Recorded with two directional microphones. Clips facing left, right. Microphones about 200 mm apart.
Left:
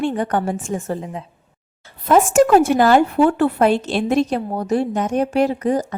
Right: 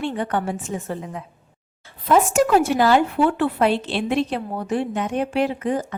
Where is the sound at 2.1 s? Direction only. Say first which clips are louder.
Left 4 dB; 50° left (ahead or behind).